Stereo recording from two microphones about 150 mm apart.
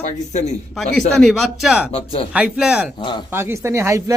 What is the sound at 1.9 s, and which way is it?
Speech, 40° left (ahead or behind).